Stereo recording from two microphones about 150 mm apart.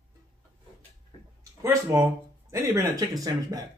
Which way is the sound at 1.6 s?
20° right (ahead or behind).